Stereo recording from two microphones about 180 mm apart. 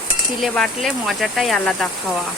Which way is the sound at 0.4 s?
Centre (ahead or behind).